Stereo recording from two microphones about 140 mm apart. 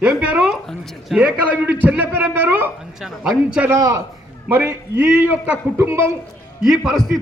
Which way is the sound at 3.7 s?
20° right (ahead or behind).